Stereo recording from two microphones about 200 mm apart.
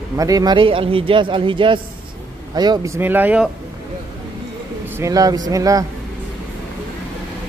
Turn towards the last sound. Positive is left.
turn(degrees=-15)  # may be behind; listen again after turning